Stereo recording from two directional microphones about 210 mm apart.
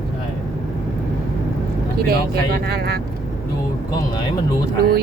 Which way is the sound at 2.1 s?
50° right (ahead or behind).